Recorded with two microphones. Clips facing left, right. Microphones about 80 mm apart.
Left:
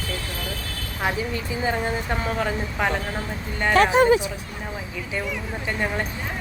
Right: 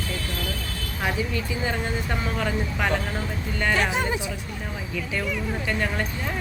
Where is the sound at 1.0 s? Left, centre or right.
Left.